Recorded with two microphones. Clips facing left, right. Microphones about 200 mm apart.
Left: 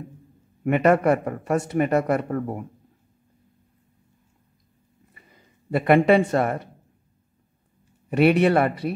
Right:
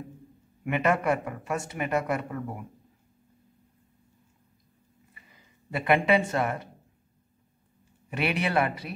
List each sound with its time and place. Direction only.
0.7 s speech: 45° left (ahead or behind)
5.7 s speech: 45° left (ahead or behind)
8.2 s speech: 50° left (ahead or behind)